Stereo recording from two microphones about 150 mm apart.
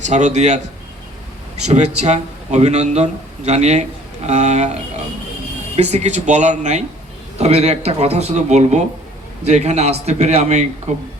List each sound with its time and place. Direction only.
0.0 s a man's voice: 55° right (ahead or behind)
2.0 s a man's voice: 50° right (ahead or behind)